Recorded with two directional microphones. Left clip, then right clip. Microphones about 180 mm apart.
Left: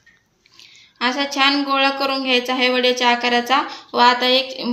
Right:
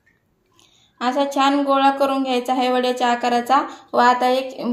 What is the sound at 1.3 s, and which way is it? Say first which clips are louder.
Speech: left 1 dB; 45° right (ahead or behind).